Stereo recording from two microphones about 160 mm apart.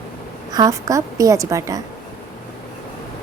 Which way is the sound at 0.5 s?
20° right (ahead or behind).